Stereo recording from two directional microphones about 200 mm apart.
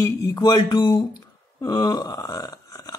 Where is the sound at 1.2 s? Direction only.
20° left (ahead or behind).